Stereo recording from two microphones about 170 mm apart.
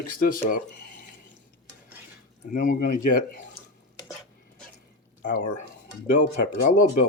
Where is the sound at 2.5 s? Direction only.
55° left (ahead or behind).